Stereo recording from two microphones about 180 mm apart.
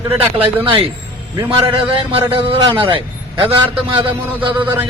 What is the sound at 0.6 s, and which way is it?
A man's voice, 30° right (ahead or behind).